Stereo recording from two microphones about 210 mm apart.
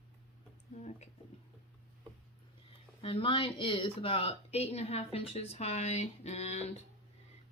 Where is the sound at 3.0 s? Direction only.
25° left (ahead or behind).